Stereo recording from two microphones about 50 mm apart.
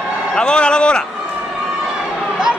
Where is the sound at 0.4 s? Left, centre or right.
Centre.